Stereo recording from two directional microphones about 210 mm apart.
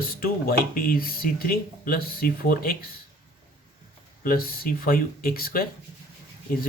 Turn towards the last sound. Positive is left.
turn(degrees=45)  # may be behind; listen again after turning